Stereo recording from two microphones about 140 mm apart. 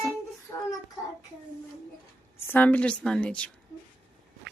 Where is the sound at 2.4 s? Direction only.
10° left (ahead or behind).